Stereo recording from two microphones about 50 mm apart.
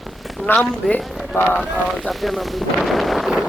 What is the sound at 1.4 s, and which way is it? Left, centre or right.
Speech, left.